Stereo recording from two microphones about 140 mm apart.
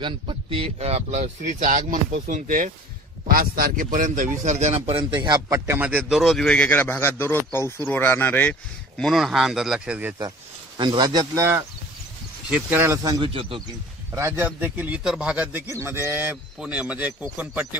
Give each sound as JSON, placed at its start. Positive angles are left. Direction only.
{"t": 0.0, "sound": "speech", "side_deg": -40}
{"t": 3.3, "sound": "speech", "side_deg": -90}
{"t": 5.7, "sound": "a man's voice", "side_deg": -15}
{"t": 10.8, "sound": "a man's voice", "side_deg": -35}
{"t": 12.4, "sound": "a man's voice", "side_deg": -10}
{"t": 13.0, "sound": "a man's voice", "side_deg": -25}
{"t": 13.3, "sound": "speech", "side_deg": -40}
{"t": 14.1, "sound": "a man's voice", "side_deg": -20}